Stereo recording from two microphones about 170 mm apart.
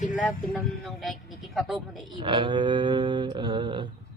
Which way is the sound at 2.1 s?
30° right (ahead or behind).